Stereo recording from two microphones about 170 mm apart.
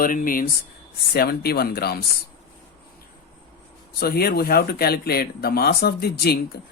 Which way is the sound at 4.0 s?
65° left (ahead or behind).